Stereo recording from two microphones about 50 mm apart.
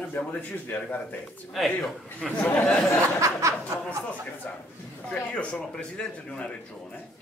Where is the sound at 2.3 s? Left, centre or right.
Left.